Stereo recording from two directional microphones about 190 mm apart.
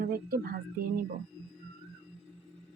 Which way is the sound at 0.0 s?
50° right (ahead or behind).